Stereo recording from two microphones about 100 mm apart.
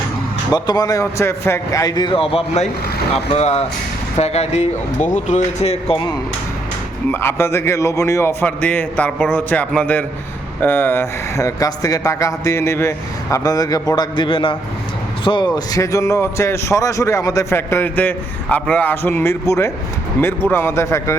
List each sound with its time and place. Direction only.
0.5 s a man's voice: 40° left (ahead or behind)
2.0 s a man's voice: 60° left (ahead or behind)
3.3 s speech: 90° left
7.1 s a man's voice: 25° left (ahead or behind)